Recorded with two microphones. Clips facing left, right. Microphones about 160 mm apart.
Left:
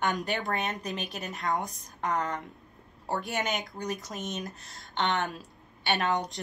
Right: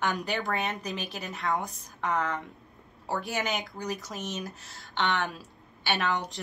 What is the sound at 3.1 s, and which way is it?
Speech, 20° left (ahead or behind).